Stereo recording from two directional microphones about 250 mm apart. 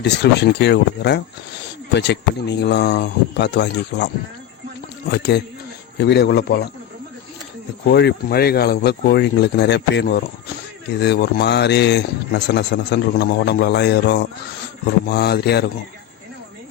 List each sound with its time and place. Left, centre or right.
0.0 s a man's voice: left
5.1 s a man's voice: left
7.9 s a man's voice: left